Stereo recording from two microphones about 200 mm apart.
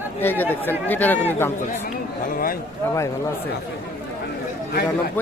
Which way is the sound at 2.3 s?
45° left (ahead or behind).